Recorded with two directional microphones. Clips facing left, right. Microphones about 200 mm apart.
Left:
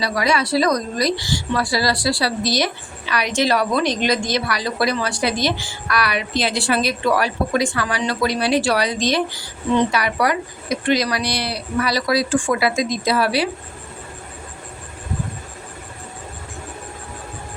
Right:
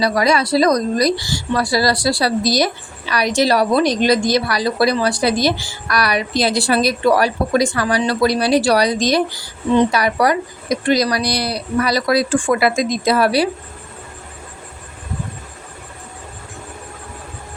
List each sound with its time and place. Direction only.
0.0 s a woman's voice: 40° right (ahead or behind)